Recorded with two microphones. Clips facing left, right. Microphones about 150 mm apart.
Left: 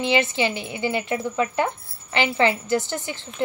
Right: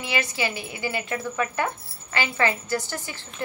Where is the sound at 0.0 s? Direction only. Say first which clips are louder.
Left 6 dB; 25° left (ahead or behind).